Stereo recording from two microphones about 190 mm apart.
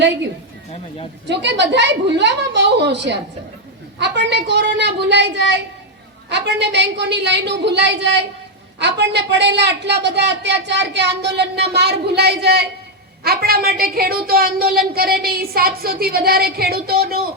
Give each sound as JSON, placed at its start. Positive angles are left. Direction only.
{"t": 1.3, "sound": "a woman's voice", "side_deg": -65}